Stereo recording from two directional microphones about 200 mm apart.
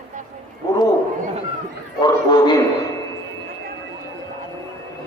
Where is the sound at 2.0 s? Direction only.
20° left (ahead or behind).